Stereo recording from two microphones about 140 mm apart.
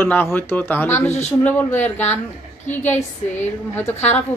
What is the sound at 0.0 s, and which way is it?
Speech, 15° left (ahead or behind).